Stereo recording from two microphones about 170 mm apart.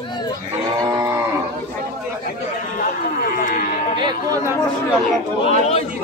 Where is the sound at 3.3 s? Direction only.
60° left (ahead or behind).